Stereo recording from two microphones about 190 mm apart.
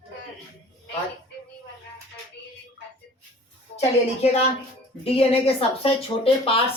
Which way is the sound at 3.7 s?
35° left (ahead or behind).